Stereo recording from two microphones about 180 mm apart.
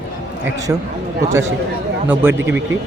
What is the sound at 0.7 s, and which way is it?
Speech, 15° right (ahead or behind).